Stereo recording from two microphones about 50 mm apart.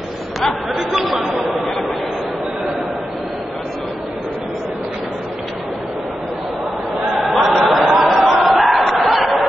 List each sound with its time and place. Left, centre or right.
0.4 s chatter: centre
7.2 s choir: centre
7.9 s a sound: centre